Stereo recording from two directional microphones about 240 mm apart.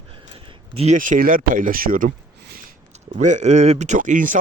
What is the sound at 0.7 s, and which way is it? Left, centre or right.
A man's voice, right.